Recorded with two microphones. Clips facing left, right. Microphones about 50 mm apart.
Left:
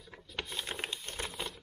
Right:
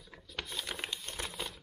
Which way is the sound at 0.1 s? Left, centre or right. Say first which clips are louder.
Left 1 dB; centre.